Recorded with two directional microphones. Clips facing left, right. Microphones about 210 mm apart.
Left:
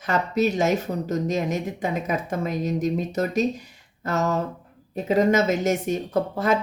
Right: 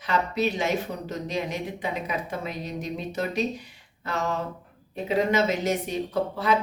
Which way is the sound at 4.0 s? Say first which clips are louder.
Left 5 dB; 45° left (ahead or behind).